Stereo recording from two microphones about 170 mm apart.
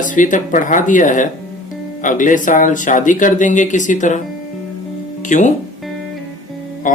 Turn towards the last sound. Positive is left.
turn(degrees=50)  # may be behind; listen again after turning